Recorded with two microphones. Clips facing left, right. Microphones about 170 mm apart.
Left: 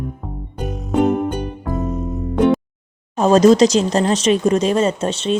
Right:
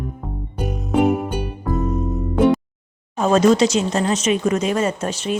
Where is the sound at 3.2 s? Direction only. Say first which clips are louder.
Left 4 dB; 35° left (ahead or behind).